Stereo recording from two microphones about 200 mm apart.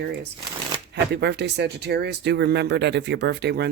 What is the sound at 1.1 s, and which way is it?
Speech, 60° right (ahead or behind).